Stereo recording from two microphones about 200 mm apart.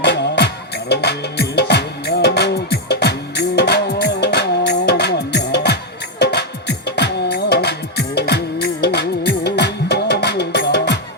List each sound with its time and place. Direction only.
0.0 s music: 60° left (ahead or behind)